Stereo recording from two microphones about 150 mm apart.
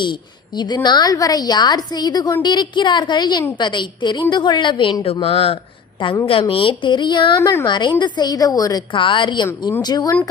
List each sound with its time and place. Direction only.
0.0 s a woman's voice: 30° left (ahead or behind)
5.2 s a woman's voice: 40° left (ahead or behind)